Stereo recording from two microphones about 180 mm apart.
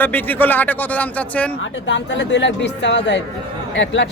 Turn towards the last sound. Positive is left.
turn(degrees=90)